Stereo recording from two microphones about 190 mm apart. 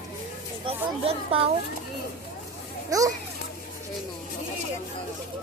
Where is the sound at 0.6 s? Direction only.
30° right (ahead or behind).